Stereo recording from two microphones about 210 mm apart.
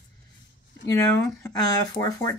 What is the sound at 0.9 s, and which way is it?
Speech, 15° left (ahead or behind).